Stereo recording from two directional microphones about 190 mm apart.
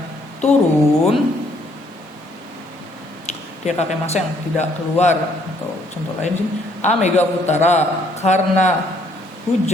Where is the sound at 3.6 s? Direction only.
35° left (ahead or behind).